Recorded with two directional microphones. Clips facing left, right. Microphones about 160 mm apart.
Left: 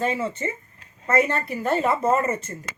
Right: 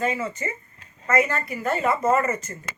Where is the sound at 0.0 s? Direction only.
30° left (ahead or behind).